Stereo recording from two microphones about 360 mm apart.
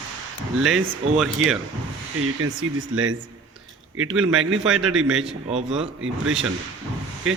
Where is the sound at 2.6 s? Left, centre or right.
Right.